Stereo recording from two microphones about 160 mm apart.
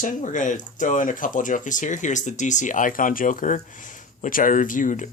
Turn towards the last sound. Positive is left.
turn(degrees=55)  # may be behind; listen again after turning